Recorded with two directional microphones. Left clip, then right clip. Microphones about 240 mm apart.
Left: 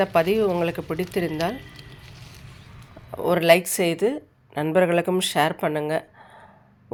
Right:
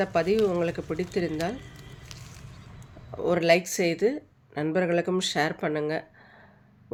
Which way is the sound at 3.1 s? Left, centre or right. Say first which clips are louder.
Left 5 dB; centre.